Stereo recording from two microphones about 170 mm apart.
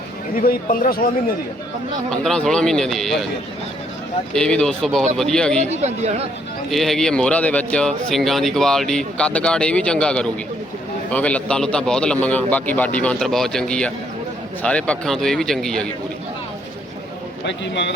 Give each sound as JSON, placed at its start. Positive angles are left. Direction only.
{"t": 0.3, "sound": "speech", "side_deg": 55}
{"t": 2.0, "sound": "speech", "side_deg": 5}
{"t": 4.4, "sound": "speech", "side_deg": 5}
{"t": 5.7, "sound": "speech", "side_deg": -40}
{"t": 6.7, "sound": "a man's voice", "side_deg": 0}
{"t": 17.4, "sound": "a man's voice", "side_deg": 90}